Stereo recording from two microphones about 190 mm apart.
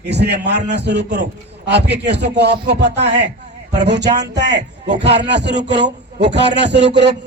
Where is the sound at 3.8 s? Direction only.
65° right (ahead or behind).